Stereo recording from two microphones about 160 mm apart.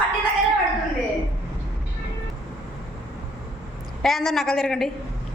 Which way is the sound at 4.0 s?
Centre (ahead or behind).